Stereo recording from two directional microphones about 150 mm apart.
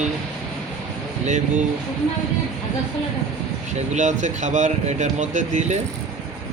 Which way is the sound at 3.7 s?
50° right (ahead or behind).